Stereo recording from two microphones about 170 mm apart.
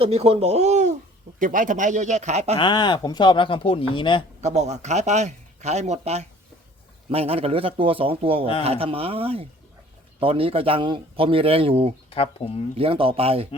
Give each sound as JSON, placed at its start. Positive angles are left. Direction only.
{"t": 0.0, "sound": "a man's voice", "side_deg": -35}
{"t": 2.6, "sound": "speech", "side_deg": 25}
{"t": 4.4, "sound": "a man's voice", "side_deg": -40}
{"t": 12.1, "sound": "speech", "side_deg": 35}
{"t": 12.7, "sound": "a man's voice", "side_deg": -35}